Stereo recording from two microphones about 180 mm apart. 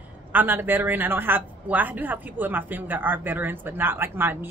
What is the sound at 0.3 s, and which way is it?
Speech, 10° right (ahead or behind).